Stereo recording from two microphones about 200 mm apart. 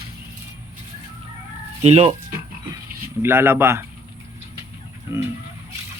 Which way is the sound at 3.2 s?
10° right (ahead or behind).